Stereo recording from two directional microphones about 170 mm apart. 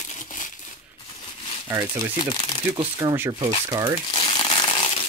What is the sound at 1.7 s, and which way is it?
Speech, 15° right (ahead or behind).